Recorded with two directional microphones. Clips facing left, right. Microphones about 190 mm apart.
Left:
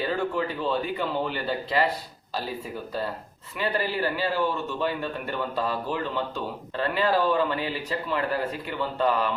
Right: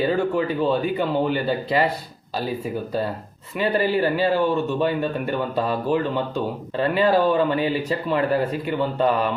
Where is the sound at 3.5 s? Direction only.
20° right (ahead or behind).